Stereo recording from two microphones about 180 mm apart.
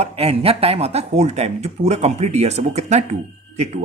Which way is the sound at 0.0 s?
35° right (ahead or behind).